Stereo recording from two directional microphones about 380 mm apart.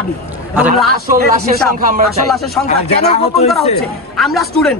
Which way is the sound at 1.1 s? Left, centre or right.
Right.